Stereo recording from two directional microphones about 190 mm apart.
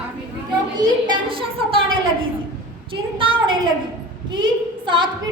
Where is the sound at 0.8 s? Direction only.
25° right (ahead or behind).